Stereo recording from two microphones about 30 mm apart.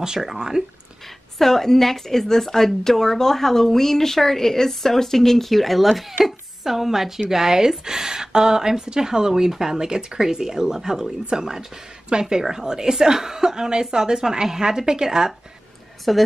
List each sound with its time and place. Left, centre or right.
0.2 s speech: centre
1.0 s a woman's voice: centre
9.8 s a woman's voice: right
16.1 s a woman's voice: centre